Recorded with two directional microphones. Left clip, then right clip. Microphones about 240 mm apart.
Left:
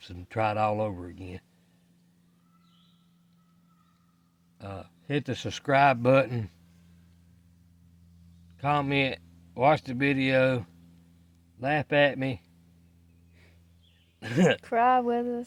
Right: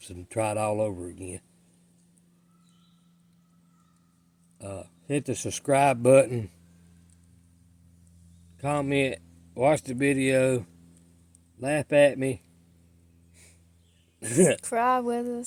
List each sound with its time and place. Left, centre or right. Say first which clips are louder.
0.0 s speech: left 1 dB; left
4.5 s speech: right 2 dB; left
8.5 s speech: even; left
14.2 s speech: right 2 dB; left
14.6 s a sound: left 1 dB; centre